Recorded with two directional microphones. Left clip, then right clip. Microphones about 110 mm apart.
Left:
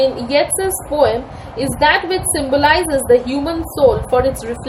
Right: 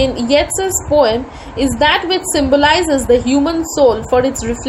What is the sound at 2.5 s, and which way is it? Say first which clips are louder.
Speech: right 1 dB; 90° right.